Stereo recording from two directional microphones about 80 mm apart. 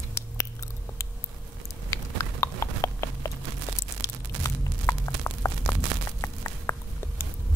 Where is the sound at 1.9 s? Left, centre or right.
Left.